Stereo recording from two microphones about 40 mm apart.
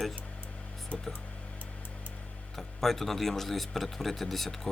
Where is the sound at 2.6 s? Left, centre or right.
Centre.